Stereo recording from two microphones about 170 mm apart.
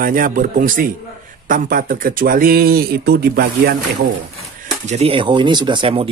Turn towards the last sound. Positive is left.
turn(degrees=-30)  # may be behind; listen again after turning